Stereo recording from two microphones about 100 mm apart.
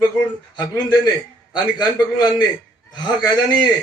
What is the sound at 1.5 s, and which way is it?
A man's voice, 45° left (ahead or behind).